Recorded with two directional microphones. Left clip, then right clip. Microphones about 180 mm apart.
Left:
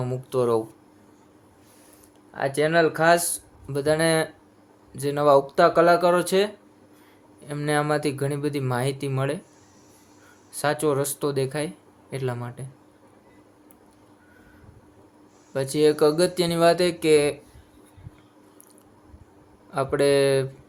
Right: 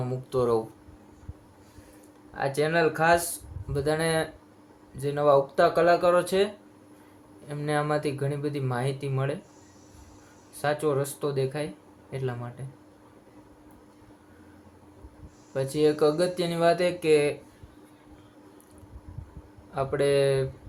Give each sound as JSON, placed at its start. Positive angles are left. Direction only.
{"t": 0.0, "sound": "speech", "side_deg": 30}
{"t": 2.3, "sound": "speech", "side_deg": 30}
{"t": 10.5, "sound": "speech", "side_deg": 45}
{"t": 15.5, "sound": "speech", "side_deg": 45}
{"t": 19.7, "sound": "speech", "side_deg": 40}